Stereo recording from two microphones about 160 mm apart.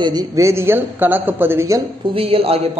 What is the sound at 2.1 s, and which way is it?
Speech, 35° right (ahead or behind).